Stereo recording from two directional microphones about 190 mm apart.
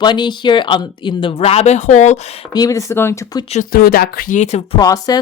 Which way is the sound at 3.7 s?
50° left (ahead or behind).